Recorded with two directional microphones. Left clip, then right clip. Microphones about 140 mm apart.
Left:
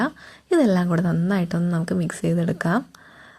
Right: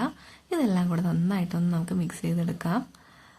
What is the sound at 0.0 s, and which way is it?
A woman's voice, 35° left (ahead or behind).